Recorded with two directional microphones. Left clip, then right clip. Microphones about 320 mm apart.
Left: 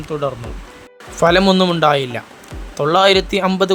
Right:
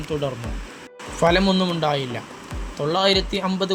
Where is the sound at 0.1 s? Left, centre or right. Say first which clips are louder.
Left 5 dB; centre.